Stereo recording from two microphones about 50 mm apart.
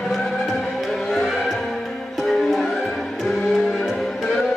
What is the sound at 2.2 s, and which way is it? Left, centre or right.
Music, centre.